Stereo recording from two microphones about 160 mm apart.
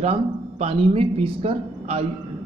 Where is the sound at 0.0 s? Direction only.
40° right (ahead or behind).